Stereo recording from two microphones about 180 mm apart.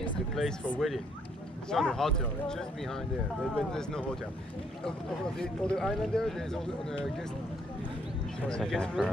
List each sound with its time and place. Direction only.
0.3 s speech: centre (ahead or behind)
5.4 s speech: 5° left (ahead or behind)
8.5 s speech: 5° left (ahead or behind)